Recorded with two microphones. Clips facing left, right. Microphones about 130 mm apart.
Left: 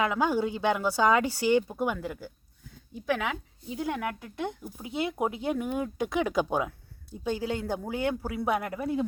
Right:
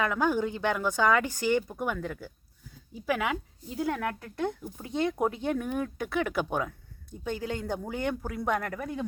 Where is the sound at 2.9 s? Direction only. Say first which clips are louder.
Even; 5° right (ahead or behind).